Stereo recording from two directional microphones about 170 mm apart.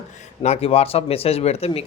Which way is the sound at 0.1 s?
40° left (ahead or behind).